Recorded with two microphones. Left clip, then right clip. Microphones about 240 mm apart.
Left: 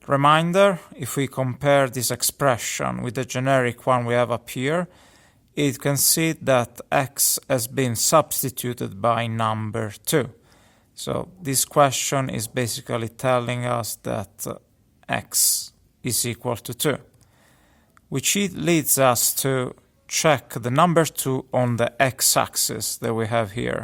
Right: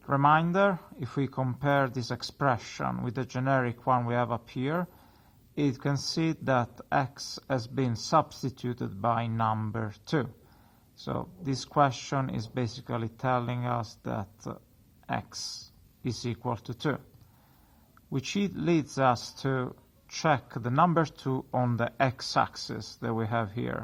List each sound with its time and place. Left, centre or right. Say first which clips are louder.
0.0 s speech: left 6 dB; left
18.1 s speech: left 9 dB; left